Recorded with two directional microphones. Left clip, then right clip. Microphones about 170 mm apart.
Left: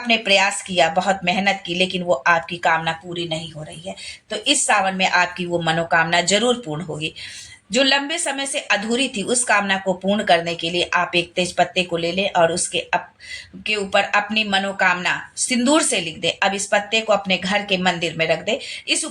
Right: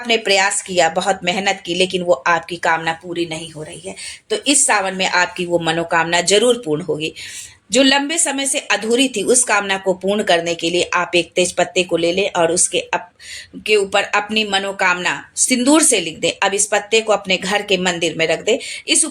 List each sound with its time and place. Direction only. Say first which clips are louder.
0.1 s a woman's voice: right 2 dB; 40° right (ahead or behind)